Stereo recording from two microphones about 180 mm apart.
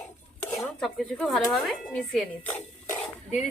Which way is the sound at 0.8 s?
Centre (ahead or behind).